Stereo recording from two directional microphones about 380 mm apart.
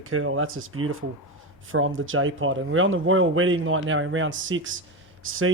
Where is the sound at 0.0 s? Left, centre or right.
Right.